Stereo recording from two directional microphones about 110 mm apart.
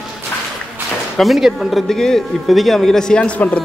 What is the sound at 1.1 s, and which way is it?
Speech, centre (ahead or behind).